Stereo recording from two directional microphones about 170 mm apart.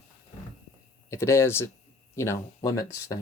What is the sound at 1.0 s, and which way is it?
Speech, 15° left (ahead or behind).